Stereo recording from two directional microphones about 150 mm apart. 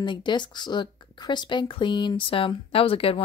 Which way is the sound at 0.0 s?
30° left (ahead or behind).